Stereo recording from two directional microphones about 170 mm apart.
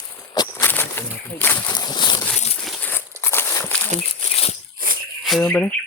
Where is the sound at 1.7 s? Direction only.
25° left (ahead or behind).